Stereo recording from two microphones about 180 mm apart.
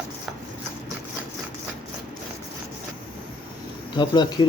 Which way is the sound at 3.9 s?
25° left (ahead or behind).